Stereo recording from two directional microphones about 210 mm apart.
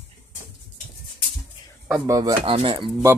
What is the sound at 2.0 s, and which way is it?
Speech, 20° right (ahead or behind).